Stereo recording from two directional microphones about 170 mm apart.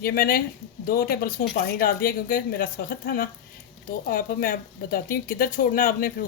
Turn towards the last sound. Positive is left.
turn(degrees=55)  # may be behind; listen again after turning